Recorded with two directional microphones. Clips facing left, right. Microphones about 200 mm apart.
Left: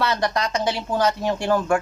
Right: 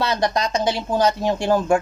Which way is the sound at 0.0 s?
20° right (ahead or behind).